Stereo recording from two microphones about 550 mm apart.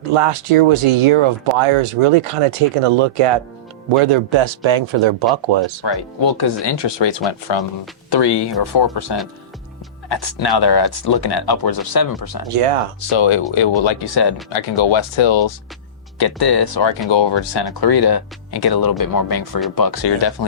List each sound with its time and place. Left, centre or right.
0.1 s speech: right
6.1 s speech: left
8.1 s speech: left
12.5 s speech: right
13.0 s speech: left
14.5 s speech: left
16.1 s speech: left